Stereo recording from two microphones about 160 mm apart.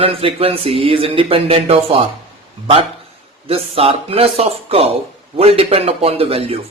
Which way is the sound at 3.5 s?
35° right (ahead or behind).